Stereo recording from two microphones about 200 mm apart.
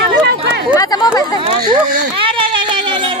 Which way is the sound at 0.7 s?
20° left (ahead or behind).